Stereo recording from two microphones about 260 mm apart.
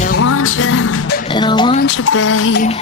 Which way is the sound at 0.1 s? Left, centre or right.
Left.